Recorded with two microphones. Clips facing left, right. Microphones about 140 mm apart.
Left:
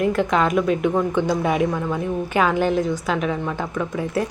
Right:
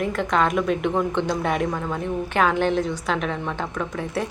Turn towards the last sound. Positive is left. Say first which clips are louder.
# left 3 dB
turn(degrees=5)  # may be behind; listen again after turning